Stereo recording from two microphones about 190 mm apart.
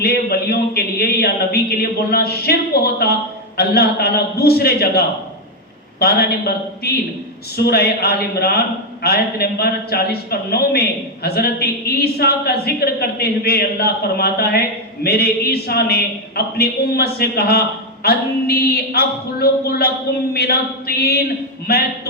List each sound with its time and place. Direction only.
0.0 s a man's voice: 55° left (ahead or behind)